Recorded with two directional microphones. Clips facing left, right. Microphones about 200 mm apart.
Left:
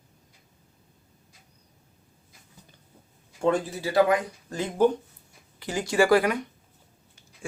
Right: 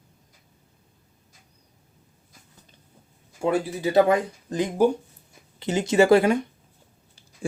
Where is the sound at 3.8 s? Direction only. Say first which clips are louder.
Right 3 dB; 20° right (ahead or behind).